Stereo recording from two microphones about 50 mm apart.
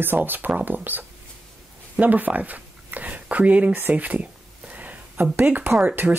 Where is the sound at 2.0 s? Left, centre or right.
Right.